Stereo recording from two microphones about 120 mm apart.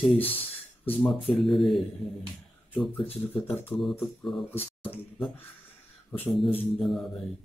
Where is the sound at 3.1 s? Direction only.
15° left (ahead or behind).